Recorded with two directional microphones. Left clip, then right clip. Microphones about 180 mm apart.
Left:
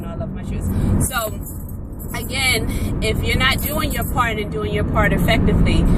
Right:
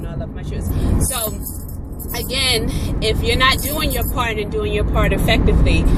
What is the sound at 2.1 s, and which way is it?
Speech, 20° left (ahead or behind).